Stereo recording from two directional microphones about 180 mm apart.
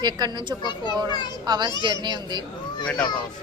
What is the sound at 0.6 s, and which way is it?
Speech, 25° left (ahead or behind).